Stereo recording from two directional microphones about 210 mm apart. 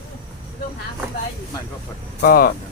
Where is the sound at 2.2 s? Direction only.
45° left (ahead or behind).